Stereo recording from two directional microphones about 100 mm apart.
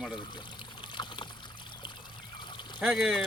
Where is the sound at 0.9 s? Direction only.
50° left (ahead or behind).